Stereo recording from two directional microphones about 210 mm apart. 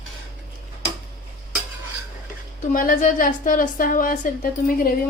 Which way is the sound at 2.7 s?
40° left (ahead or behind).